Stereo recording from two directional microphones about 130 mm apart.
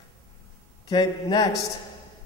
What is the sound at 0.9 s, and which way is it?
Speech, 30° left (ahead or behind).